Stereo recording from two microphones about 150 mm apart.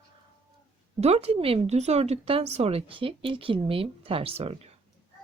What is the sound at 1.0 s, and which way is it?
A woman's voice, 45° right (ahead or behind).